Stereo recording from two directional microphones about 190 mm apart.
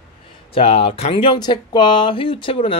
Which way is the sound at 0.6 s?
30° left (ahead or behind).